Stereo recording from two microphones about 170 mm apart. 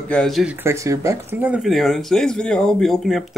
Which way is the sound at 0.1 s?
Centre (ahead or behind).